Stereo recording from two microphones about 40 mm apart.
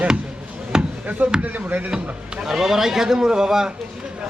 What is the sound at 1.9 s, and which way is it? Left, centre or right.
Speech, right.